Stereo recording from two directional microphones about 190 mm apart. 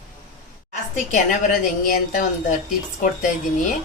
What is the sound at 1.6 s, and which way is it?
Speech, 45° left (ahead or behind).